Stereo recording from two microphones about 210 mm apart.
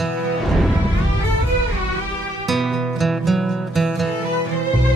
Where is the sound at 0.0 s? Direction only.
Centre (ahead or behind).